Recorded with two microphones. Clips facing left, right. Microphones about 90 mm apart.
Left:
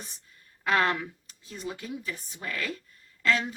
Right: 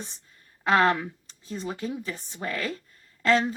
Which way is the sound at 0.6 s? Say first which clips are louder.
Right 4 dB; 30° right (ahead or behind).